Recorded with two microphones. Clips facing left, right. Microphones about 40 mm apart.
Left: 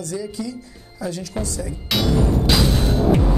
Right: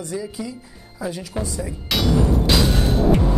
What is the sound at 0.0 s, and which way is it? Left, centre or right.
Speech, centre.